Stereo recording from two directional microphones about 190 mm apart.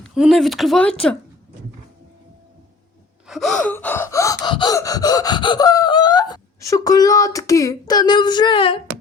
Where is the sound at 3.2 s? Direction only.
Centre (ahead or behind); by 8.8 s 30° left (ahead or behind).